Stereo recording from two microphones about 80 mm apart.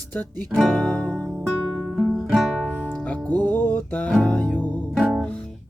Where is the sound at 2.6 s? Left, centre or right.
Centre.